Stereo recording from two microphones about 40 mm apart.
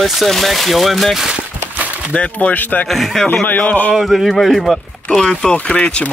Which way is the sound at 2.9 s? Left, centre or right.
Centre.